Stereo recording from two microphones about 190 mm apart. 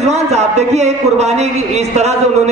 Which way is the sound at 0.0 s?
35° right (ahead or behind).